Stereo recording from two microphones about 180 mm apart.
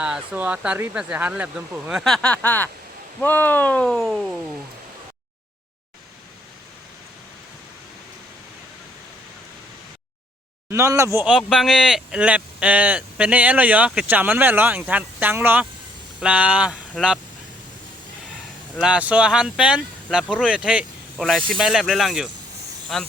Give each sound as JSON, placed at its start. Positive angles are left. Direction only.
{"t": 0.0, "sound": "speech", "side_deg": -5}
{"t": 10.7, "sound": "speech", "side_deg": -15}
{"t": 11.3, "sound": "speech", "side_deg": 0}
{"t": 18.8, "sound": "speech", "side_deg": -5}